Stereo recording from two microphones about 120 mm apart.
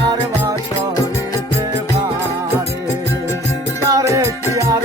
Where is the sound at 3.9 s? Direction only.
25° right (ahead or behind).